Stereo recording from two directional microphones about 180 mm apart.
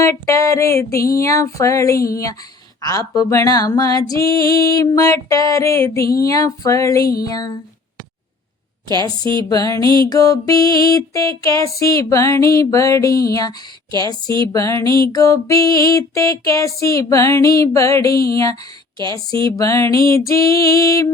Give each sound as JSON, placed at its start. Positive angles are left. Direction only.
{"t": 0.0, "sound": "music", "side_deg": 15}
{"t": 2.8, "sound": "female singing", "side_deg": 20}
{"t": 4.5, "sound": "music", "side_deg": 20}
{"t": 6.2, "sound": "female singing", "side_deg": 20}
{"t": 8.9, "sound": "female singing", "side_deg": 20}
{"t": 10.8, "sound": "music", "side_deg": 20}